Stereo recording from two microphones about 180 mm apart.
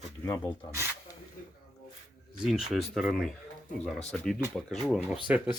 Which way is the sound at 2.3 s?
5° right (ahead or behind).